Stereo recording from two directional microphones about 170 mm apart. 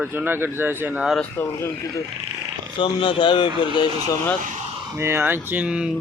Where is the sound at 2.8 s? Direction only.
30° left (ahead or behind).